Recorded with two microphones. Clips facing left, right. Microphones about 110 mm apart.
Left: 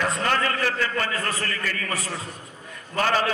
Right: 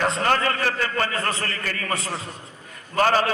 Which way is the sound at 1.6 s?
45° right (ahead or behind).